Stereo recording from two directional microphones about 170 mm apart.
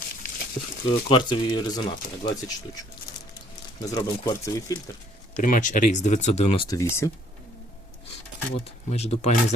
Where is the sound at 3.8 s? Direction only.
25° left (ahead or behind).